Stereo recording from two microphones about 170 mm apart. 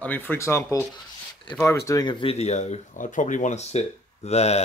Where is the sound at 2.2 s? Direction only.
40° left (ahead or behind).